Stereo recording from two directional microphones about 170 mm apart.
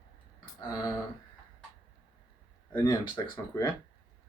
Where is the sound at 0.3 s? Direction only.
25° left (ahead or behind).